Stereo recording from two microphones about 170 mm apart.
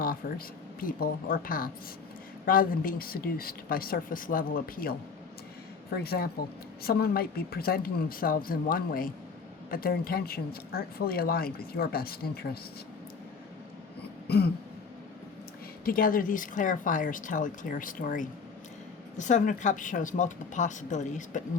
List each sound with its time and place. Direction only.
0.0 s speech: 60° left (ahead or behind)
14.3 s throat clearing: 70° left (ahead or behind)
15.8 s speech: 55° left (ahead or behind)